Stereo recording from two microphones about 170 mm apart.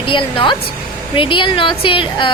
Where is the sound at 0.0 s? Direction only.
30° left (ahead or behind).